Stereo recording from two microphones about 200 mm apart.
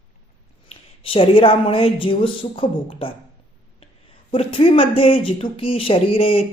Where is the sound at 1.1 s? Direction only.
25° left (ahead or behind).